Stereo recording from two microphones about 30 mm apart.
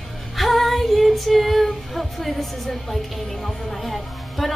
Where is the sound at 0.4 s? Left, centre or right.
Centre.